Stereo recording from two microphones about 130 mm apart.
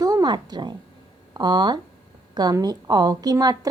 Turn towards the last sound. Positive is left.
turn(degrees=-30)  # may be behind; listen again after turning